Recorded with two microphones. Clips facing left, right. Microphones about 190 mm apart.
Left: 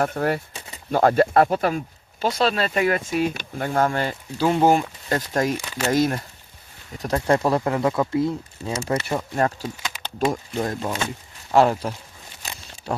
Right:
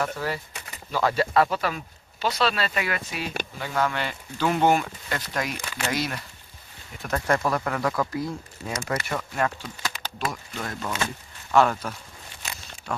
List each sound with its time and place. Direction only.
0.0 s speech: 55° left (ahead or behind)
4.4 s speech: 30° left (ahead or behind)
5.1 s speech: 40° left (ahead or behind)
7.0 s speech: 30° left (ahead or behind)
12.4 s a sound: 35° left (ahead or behind)